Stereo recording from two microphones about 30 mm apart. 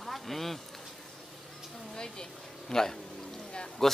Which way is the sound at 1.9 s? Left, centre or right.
Left.